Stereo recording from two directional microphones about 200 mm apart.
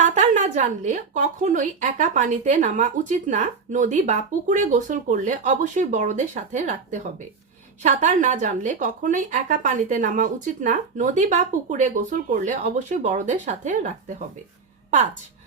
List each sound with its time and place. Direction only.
0.0 s a woman's voice: 35° right (ahead or behind)